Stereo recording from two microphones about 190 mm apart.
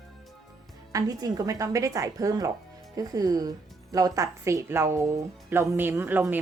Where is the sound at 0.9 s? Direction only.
20° right (ahead or behind).